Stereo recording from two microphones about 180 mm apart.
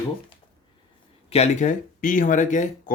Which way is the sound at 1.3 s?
40° left (ahead or behind).